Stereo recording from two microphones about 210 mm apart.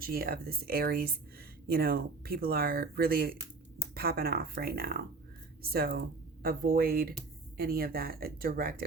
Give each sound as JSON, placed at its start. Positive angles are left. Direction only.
{"t": 0.0, "sound": "speech", "side_deg": -45}